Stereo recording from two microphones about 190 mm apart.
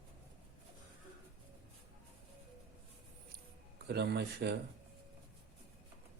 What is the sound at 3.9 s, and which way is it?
Speech, 60° right (ahead or behind).